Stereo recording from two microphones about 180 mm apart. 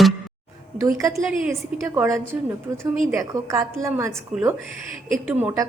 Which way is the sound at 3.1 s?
15° right (ahead or behind).